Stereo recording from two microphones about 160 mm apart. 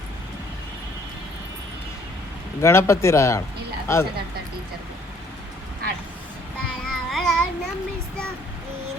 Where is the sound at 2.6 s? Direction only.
15° left (ahead or behind).